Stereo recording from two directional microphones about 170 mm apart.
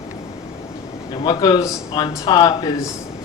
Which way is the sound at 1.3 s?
25° left (ahead or behind).